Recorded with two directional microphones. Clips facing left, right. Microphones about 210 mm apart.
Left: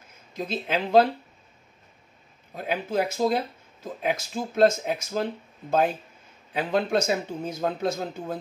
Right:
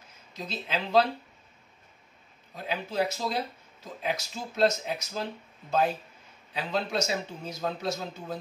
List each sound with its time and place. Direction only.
0.3 s speech: 50° left (ahead or behind)
2.5 s speech: 50° left (ahead or behind)